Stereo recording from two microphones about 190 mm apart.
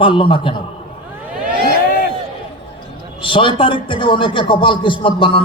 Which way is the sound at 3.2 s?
25° left (ahead or behind).